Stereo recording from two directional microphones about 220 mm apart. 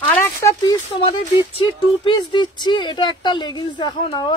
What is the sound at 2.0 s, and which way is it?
Speech, 20° left (ahead or behind).